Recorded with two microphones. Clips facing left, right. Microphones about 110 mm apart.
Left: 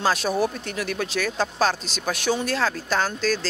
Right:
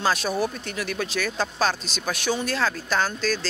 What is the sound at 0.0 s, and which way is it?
Speech, 40° left (ahead or behind).